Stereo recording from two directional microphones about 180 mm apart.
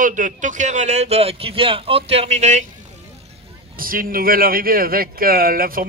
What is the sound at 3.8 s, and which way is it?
Speech, 50° right (ahead or behind).